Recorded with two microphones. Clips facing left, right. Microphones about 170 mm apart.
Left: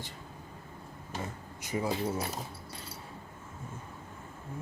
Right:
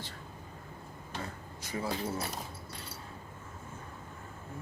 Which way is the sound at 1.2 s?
15° left (ahead or behind).